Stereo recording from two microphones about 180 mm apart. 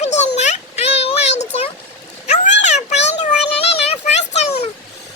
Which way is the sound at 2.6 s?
40° left (ahead or behind).